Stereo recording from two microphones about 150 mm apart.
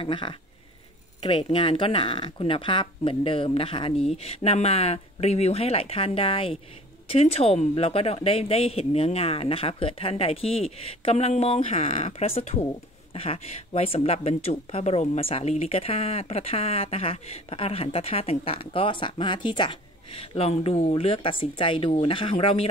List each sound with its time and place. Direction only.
0.0 s speech: 35° left (ahead or behind)